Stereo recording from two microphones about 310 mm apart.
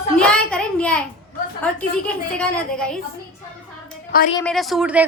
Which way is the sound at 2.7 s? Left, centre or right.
Centre.